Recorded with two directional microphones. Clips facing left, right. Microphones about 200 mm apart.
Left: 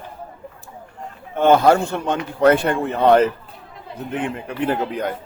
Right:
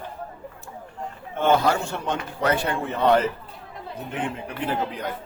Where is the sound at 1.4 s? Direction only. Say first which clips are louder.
Left 6 dB; 55° left (ahead or behind).